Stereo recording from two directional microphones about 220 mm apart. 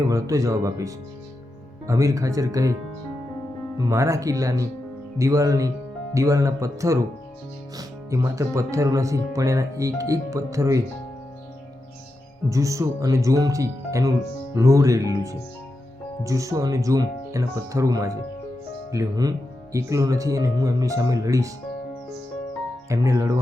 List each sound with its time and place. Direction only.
0.0 s speech: 15° right (ahead or behind)
3.8 s speech: 15° right (ahead or behind)
12.5 s speech: 15° right (ahead or behind)
22.9 s speech: 15° right (ahead or behind)